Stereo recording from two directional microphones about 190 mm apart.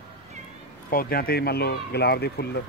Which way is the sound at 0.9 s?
50° left (ahead or behind).